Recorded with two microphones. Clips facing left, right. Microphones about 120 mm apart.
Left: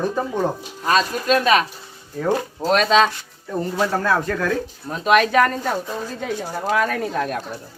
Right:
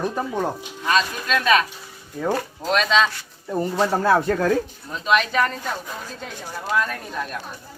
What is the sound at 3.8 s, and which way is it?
Speech, 20° right (ahead or behind).